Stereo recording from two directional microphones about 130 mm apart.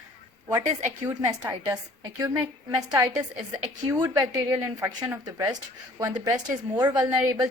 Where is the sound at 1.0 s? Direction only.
25° right (ahead or behind).